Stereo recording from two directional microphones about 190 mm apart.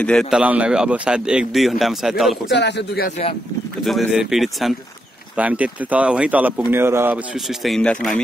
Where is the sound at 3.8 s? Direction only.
Centre (ahead or behind).